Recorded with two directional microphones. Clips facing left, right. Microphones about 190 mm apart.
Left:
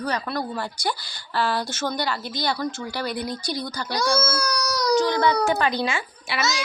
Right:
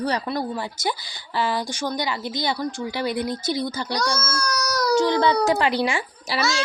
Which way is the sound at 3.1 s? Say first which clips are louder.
Right 3 dB; 55° right (ahead or behind).